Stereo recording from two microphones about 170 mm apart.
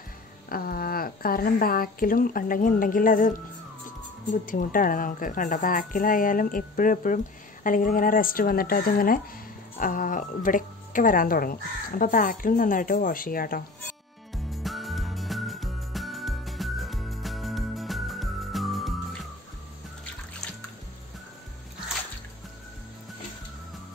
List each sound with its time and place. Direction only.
0.5 s speech: 60° left (ahead or behind)
14.3 s music: centre (ahead or behind)